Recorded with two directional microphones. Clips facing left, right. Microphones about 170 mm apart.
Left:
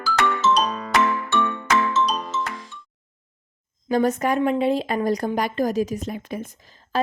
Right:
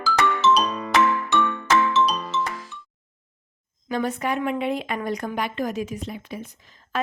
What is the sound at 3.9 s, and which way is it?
Speech, 40° left (ahead or behind).